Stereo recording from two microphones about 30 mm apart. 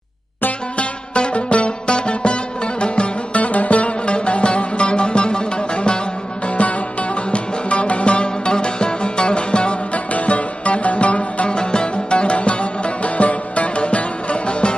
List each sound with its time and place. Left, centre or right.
0.8 s music: left
3.3 s music: left
7.3 s music: left
9.9 s music: left
11.4 s music: left